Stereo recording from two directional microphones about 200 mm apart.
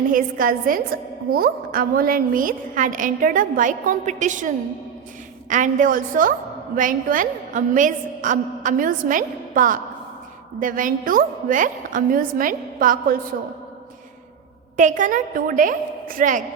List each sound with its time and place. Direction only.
0.1 s a woman's voice: 45° right (ahead or behind)
14.8 s a woman's voice: 40° right (ahead or behind)